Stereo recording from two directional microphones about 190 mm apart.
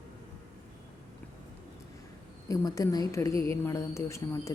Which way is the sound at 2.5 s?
20° left (ahead or behind).